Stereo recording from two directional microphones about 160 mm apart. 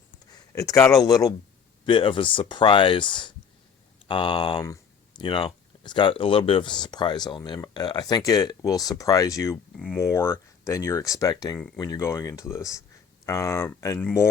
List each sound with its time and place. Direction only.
0.3 s speech: 20° left (ahead or behind)
4.6 s a sound: 20° left (ahead or behind)
5.2 s speech: 30° left (ahead or behind)
9.7 s speech: 5° left (ahead or behind)
10.0 s speech: 15° left (ahead or behind)